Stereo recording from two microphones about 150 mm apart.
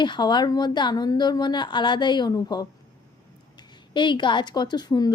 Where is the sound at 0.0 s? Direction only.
30° left (ahead or behind).